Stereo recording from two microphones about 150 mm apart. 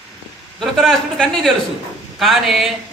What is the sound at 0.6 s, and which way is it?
A man's voice, centre (ahead or behind).